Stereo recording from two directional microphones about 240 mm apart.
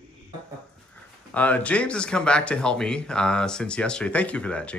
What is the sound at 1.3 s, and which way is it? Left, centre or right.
Speech, centre.